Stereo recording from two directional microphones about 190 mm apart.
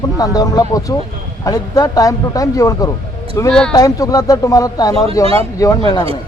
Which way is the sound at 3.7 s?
20° left (ahead or behind).